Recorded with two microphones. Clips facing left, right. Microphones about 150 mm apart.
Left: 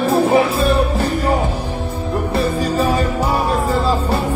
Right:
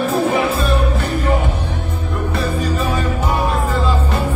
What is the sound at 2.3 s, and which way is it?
Music, 35° left (ahead or behind).